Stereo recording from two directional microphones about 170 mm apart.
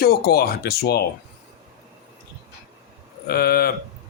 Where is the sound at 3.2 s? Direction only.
65° left (ahead or behind).